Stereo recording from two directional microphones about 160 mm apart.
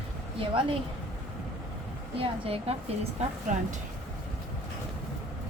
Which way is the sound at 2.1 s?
35° right (ahead or behind).